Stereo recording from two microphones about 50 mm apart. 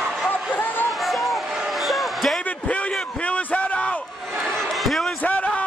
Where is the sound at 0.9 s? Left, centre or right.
Centre.